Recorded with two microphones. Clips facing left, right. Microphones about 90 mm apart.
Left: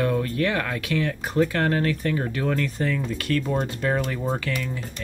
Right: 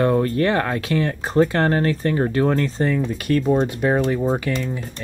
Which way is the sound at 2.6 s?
25° right (ahead or behind).